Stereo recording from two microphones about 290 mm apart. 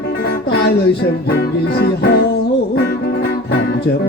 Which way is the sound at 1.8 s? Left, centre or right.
Left.